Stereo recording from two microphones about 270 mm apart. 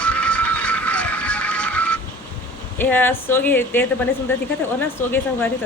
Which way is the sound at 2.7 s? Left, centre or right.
Centre.